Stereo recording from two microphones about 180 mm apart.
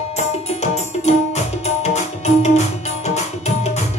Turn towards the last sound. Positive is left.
turn(degrees=40)  # may be behind; listen again after turning